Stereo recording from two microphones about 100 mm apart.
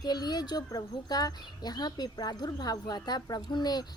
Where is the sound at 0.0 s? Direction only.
45° left (ahead or behind).